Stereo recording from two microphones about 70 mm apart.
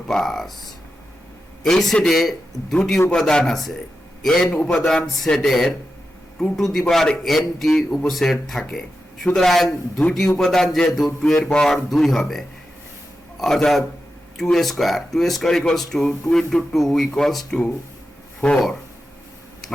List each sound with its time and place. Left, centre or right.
0.1 s a man's voice: centre
4.5 s a man's voice: centre
6.7 s a man's voice: centre